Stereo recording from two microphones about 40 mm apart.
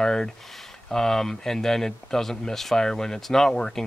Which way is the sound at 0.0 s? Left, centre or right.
Centre.